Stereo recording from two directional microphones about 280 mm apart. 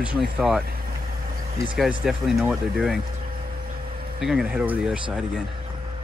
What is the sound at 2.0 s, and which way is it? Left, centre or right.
Speech, centre.